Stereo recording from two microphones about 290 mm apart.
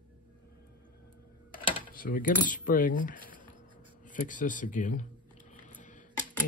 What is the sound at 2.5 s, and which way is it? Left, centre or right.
Speech, left.